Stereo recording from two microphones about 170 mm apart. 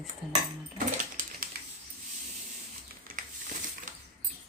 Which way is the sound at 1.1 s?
55° right (ahead or behind).